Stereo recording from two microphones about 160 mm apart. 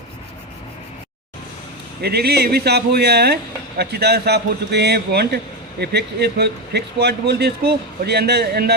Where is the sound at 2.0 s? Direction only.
80° right.